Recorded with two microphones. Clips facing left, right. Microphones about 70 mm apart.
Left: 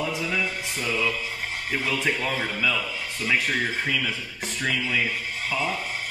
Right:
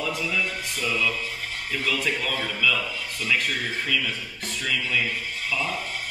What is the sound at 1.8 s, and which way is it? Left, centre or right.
Speech, centre.